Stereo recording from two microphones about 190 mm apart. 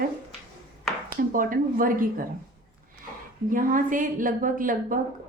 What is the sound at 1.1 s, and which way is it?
A woman's voice, 45° right (ahead or behind).